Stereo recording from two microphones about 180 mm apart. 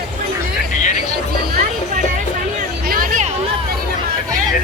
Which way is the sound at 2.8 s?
50° right (ahead or behind).